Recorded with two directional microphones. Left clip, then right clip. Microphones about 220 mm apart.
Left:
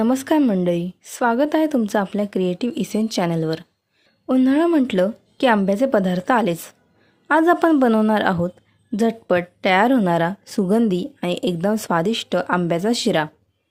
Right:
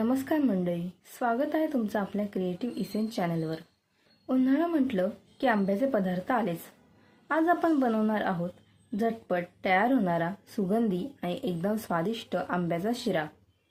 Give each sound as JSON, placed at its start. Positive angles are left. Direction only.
{"t": 0.0, "sound": "a woman's voice", "side_deg": 45}